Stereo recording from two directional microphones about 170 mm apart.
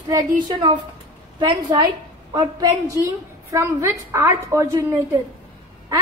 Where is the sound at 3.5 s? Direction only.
15° right (ahead or behind).